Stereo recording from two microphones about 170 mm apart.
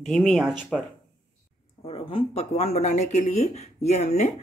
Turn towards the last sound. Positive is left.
turn(degrees=40)  # may be behind; listen again after turning